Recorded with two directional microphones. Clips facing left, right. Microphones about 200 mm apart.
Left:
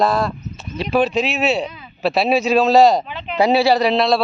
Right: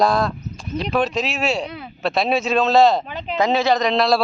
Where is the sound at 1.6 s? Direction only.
70° right (ahead or behind).